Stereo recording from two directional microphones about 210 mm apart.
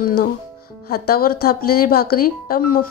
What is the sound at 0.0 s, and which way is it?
Speech, 45° left (ahead or behind).